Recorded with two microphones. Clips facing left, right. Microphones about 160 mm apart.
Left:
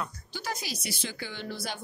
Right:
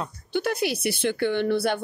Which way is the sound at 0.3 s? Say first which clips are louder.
Right 17 dB; 60° right (ahead or behind).